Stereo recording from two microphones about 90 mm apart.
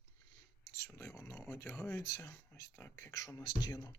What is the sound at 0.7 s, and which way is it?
Speech, 30° left (ahead or behind).